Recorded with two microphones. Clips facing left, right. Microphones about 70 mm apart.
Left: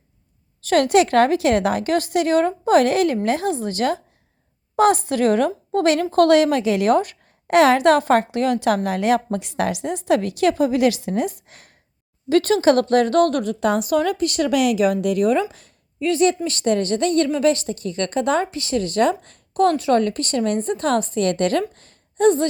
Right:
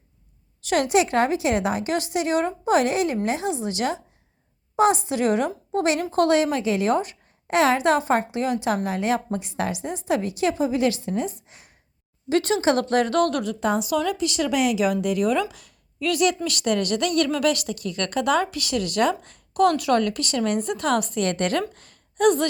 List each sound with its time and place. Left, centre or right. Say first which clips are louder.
0.7 s a woman's voice: left 5 dB; left
1.5 s speech: left 5 dB; centre
1.7 s a woman's voice: left 5 dB; left
4.8 s a woman's voice: left 3 dB; left
6.1 s a woman's voice: left 5 dB; left
6.5 s speech: left 4 dB; centre
6.7 s a woman's voice: left 5 dB; left
7.5 s speech: left 5 dB; centre
7.9 s a woman's voice: left 4 dB; left
9.9 s a woman's voice: left 5 dB; left
11.3 s speech: left 2 dB; centre
12.3 s a woman's voice: left 5 dB; left
15.4 s a woman's voice: left 3 dB; left
21.8 s a sound: left 3 dB; left